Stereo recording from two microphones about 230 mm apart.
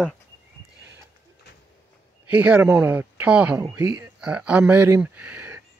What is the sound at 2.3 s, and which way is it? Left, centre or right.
Speech, centre.